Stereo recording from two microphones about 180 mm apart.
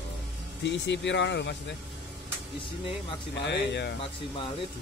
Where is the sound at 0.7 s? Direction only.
75° left (ahead or behind).